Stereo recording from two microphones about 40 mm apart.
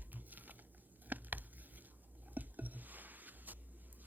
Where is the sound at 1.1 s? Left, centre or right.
Right.